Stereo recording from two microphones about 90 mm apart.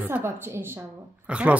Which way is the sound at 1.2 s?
10° right (ahead or behind).